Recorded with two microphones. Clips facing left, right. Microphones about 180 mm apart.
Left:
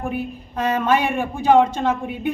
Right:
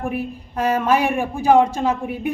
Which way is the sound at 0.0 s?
10° right (ahead or behind).